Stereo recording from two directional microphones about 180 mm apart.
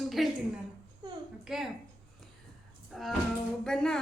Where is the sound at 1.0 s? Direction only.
25° right (ahead or behind).